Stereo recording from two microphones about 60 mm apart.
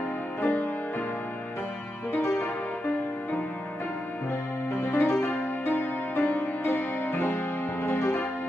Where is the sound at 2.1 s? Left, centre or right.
Left.